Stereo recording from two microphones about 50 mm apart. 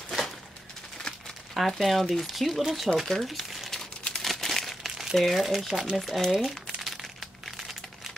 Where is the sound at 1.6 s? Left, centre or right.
Centre.